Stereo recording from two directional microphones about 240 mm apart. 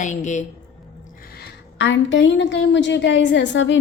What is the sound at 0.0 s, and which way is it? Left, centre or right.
Speech, left.